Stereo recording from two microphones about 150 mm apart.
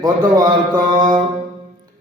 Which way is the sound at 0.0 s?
25° right (ahead or behind).